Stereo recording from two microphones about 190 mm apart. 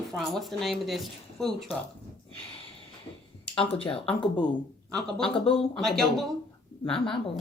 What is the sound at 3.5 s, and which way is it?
Speech, 30° left (ahead or behind).